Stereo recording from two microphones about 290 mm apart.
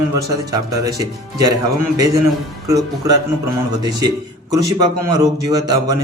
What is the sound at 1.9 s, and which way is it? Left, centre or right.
Speech, centre.